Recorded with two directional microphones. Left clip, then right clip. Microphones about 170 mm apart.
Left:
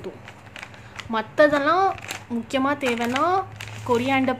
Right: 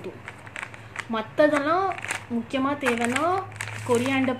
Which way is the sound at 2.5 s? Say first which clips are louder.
Left 2 dB; 15° left (ahead or behind).